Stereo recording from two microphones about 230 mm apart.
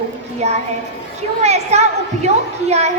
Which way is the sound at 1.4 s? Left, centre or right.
Right.